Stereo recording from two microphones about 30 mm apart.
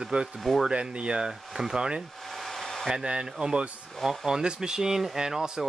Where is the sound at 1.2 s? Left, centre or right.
Right.